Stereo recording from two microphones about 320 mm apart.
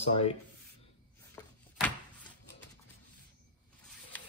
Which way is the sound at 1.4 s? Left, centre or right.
Centre.